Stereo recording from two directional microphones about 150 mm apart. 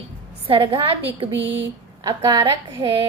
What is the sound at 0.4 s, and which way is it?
Speech, 35° right (ahead or behind).